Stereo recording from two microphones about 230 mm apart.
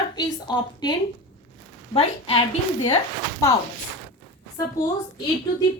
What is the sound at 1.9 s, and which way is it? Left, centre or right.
Speech, left.